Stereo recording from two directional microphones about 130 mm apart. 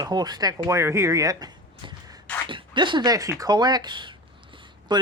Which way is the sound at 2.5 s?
35° right (ahead or behind).